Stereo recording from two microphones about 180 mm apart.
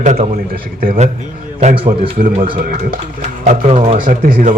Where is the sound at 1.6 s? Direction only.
40° right (ahead or behind).